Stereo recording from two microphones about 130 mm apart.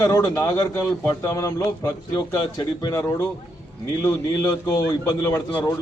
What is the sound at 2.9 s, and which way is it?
A man's voice, 20° left (ahead or behind).